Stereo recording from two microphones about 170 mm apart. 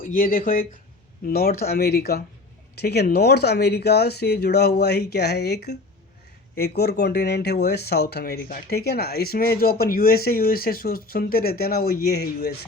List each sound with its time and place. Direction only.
0.0 s speech: 55° left (ahead or behind)